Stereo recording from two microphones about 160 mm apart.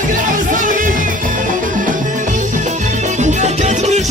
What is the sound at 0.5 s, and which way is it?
Music, 55° right (ahead or behind).